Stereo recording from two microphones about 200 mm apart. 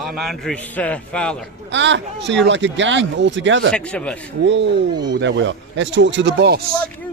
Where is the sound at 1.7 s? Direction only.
65° right (ahead or behind).